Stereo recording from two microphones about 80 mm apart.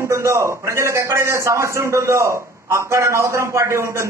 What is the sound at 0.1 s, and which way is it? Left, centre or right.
A man's voice, right.